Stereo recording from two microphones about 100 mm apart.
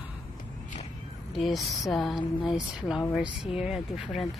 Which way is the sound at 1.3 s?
Centre (ahead or behind).